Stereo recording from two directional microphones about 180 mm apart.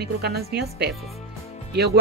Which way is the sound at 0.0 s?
60° right (ahead or behind).